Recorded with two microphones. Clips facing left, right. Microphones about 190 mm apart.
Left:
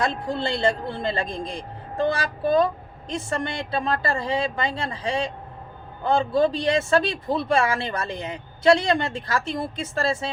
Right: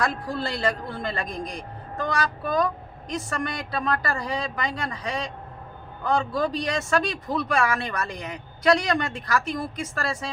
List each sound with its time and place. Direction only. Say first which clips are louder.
0.0 s a woman's voice: left 2 dB; 25° left (ahead or behind)